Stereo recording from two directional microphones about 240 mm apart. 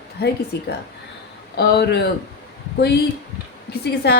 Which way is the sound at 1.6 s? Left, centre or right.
Left.